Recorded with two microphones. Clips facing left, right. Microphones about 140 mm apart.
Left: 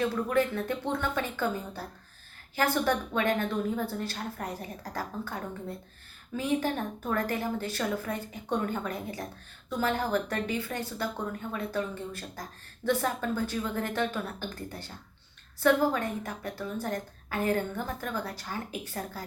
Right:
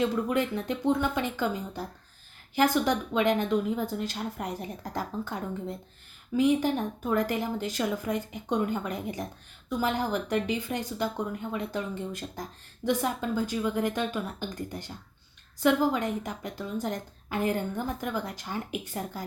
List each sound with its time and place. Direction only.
0.0 s a woman's voice: 15° right (ahead or behind)